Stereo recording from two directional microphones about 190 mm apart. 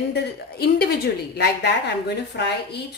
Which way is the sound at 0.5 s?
55° left (ahead or behind).